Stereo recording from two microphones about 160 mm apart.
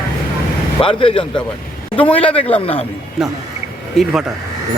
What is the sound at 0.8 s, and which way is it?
Speech, 35° left (ahead or behind).